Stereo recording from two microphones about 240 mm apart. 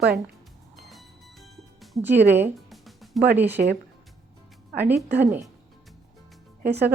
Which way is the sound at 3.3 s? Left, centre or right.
Centre.